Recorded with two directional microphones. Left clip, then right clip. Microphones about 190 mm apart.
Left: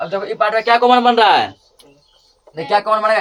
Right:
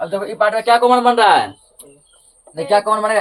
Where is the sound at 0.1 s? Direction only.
25° left (ahead or behind).